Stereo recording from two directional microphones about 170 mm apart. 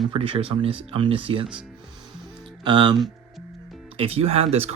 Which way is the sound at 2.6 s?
25° right (ahead or behind).